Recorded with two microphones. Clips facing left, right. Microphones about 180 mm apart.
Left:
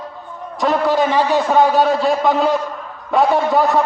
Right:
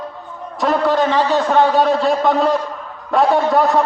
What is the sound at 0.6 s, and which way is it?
Speech, 5° left (ahead or behind).